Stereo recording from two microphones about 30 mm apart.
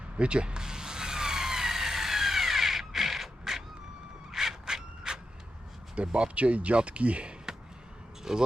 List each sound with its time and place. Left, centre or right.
0.2 s police car: right; by 3.2 s centre
3.5 s a sound: centre
4.6 s rub: right
6.0 s speech: right
7.5 s basketball bounce: right
8.3 s speech: centre